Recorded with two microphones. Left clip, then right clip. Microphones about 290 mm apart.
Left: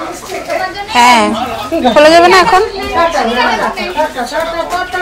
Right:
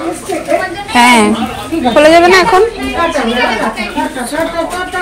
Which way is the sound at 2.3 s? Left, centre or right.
Centre.